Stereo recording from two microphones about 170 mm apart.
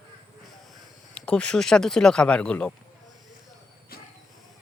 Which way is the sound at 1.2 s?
5° left (ahead or behind).